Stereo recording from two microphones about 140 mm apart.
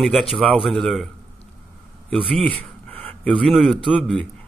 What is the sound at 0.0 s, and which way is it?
A man's voice, centre (ahead or behind).